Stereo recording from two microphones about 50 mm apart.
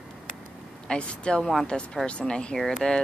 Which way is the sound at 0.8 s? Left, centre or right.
Centre.